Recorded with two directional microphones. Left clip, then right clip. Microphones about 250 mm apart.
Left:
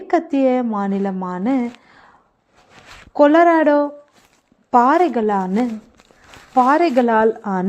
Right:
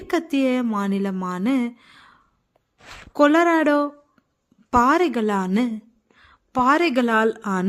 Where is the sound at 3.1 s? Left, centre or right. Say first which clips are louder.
Left 5 dB; centre.